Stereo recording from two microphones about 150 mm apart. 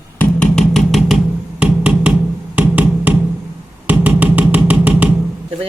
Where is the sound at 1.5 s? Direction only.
10° right (ahead or behind).